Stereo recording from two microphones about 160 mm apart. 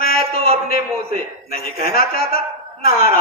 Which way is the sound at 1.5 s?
65° left (ahead or behind).